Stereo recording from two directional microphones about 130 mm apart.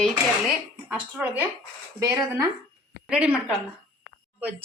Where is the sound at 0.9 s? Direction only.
10° right (ahead or behind).